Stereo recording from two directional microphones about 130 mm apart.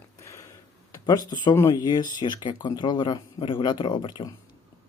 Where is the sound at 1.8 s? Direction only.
30° left (ahead or behind).